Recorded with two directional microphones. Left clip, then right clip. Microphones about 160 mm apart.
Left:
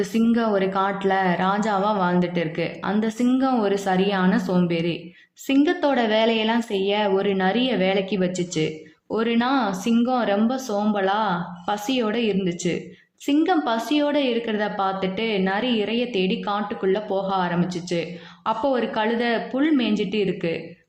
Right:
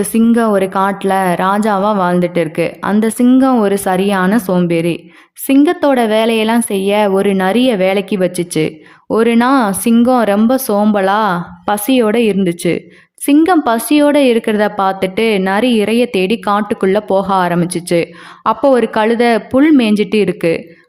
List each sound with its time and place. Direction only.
0.0 s speech: 35° right (ahead or behind)